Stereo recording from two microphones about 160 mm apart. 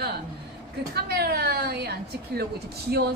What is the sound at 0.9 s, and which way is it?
Speech, 80° right.